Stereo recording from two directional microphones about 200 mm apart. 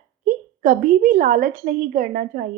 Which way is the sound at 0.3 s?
45° right (ahead or behind).